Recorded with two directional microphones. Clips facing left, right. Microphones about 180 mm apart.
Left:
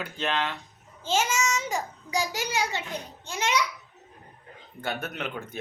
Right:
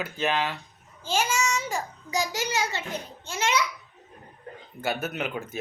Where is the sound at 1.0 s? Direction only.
20° left (ahead or behind).